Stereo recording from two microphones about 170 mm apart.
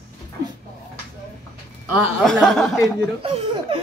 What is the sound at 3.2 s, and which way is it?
Speech, 30° right (ahead or behind).